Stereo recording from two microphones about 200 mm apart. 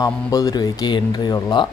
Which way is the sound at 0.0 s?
20° left (ahead or behind).